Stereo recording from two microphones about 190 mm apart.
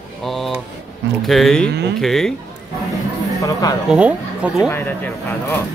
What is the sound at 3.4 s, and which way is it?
Speech, 20° left (ahead or behind).